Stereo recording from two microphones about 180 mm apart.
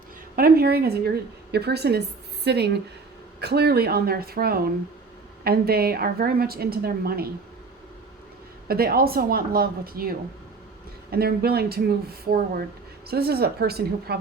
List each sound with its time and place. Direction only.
0.3 s a woman's voice: 55° right (ahead or behind)
8.6 s a woman's voice: 60° right (ahead or behind)